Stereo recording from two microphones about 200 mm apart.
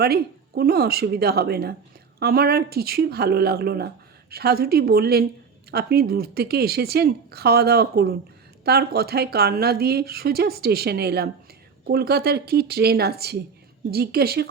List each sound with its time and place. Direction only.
0.0 s speech: 50° right (ahead or behind)